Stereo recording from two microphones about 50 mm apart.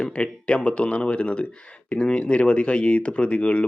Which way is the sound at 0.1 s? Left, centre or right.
Left.